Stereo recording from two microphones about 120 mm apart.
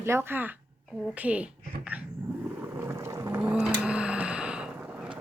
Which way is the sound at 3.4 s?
15° right (ahead or behind).